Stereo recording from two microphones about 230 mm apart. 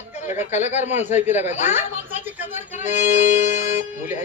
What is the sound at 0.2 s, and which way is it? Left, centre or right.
Speech, left.